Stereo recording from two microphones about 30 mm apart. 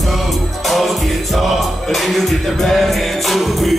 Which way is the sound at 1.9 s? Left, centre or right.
Centre.